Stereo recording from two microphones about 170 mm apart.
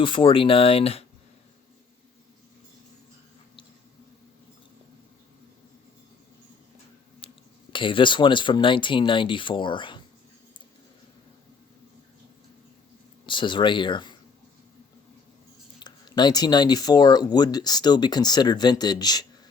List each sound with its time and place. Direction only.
0.0 s speech: 30° left (ahead or behind)
7.2 s a sound: 35° left (ahead or behind)
7.7 s speech: 30° left (ahead or behind)
13.2 s speech: 30° left (ahead or behind)
15.8 s speech: 25° left (ahead or behind)